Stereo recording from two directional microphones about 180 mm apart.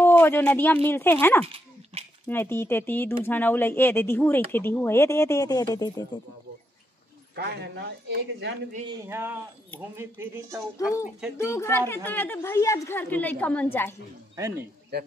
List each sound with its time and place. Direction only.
0.0 s speech: 10° left (ahead or behind)
7.3 s speech: 70° right (ahead or behind)
9.0 s speech: 10° right (ahead or behind)
11.3 s speech: 15° left (ahead or behind)